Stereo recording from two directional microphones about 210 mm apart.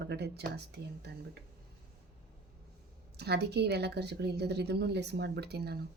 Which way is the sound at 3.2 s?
50° right (ahead or behind).